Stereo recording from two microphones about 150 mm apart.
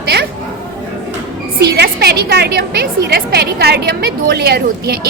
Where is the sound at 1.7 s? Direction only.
90° right.